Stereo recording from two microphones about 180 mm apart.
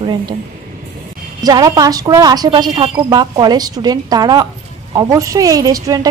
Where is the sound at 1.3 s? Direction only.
20° right (ahead or behind).